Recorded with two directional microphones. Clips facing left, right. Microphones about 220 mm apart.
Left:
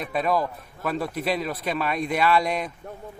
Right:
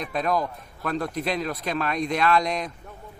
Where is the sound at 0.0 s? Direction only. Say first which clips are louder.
Left 1 dB; 5° left (ahead or behind).